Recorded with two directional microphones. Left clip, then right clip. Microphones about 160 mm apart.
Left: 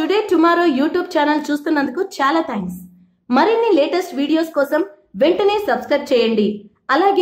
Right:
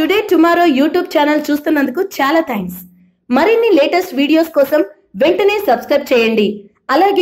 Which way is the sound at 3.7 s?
10° right (ahead or behind).